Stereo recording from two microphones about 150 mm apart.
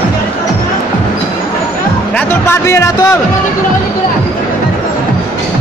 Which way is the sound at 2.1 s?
15° left (ahead or behind).